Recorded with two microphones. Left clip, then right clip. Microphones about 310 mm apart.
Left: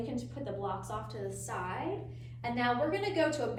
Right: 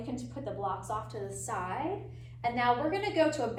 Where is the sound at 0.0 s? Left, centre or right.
Centre.